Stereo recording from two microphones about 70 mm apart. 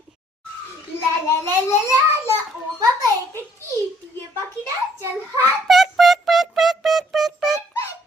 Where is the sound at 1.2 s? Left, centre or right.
Left.